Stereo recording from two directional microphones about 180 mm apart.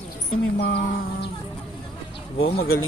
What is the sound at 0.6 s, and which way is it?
Speech, 65° left (ahead or behind).